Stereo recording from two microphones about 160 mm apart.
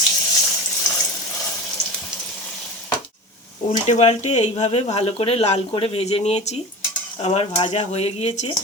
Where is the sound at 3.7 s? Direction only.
45° left (ahead or behind).